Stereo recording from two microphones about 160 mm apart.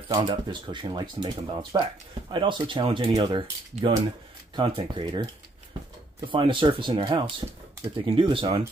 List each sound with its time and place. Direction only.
0.1 s speech: 30° right (ahead or behind)
4.6 s speech: 30° right (ahead or behind)